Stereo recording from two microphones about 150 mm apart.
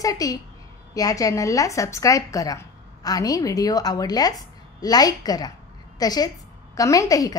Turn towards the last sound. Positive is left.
turn(degrees=25)  # may be behind; listen again after turning